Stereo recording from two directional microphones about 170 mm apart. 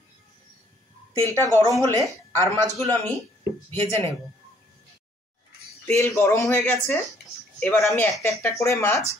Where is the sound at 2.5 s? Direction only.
15° left (ahead or behind).